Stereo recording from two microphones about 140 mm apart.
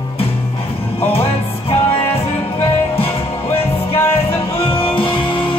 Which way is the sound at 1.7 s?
45° left (ahead or behind).